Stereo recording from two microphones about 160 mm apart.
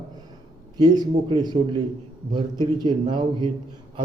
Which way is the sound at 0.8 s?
25° right (ahead or behind).